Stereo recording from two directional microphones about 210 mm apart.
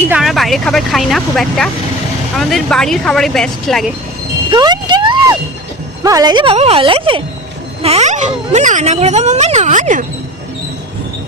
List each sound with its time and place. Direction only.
0.1 s speech: centre (ahead or behind)
4.5 s music: 20° right (ahead or behind)
6.0 s speech: 15° right (ahead or behind); by 10.1 s 35° right (ahead or behind)